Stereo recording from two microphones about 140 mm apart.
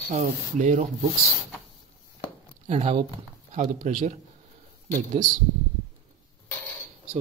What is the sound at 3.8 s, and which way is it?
Speech, 70° right (ahead or behind).